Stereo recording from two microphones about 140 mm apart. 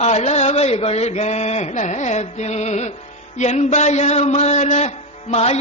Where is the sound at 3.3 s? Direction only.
55° left (ahead or behind).